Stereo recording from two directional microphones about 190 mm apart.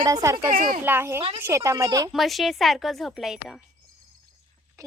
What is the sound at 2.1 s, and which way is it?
A woman's voice, centre (ahead or behind).